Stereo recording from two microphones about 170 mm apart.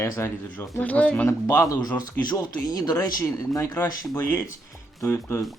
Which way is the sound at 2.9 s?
15° left (ahead or behind).